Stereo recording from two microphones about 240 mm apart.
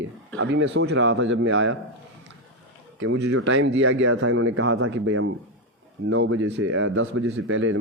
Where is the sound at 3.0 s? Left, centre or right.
Right.